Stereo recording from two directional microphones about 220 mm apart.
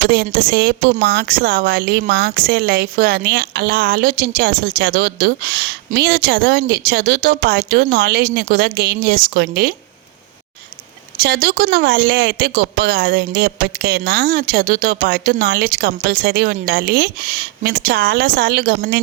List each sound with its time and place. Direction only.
0.1 s a woman's voice: 45° right (ahead or behind)
11.2 s a woman's voice: 45° right (ahead or behind)